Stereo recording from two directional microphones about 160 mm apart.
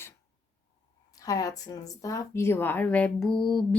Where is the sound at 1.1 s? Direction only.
20° left (ahead or behind).